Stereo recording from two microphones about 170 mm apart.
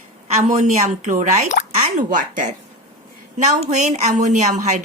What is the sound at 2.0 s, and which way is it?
A woman's voice, 50° right (ahead or behind).